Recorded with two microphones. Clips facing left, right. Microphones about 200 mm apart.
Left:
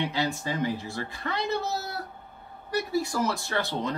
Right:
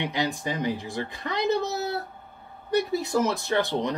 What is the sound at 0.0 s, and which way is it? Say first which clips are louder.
Speech: right 1 dB; 15° right (ahead or behind).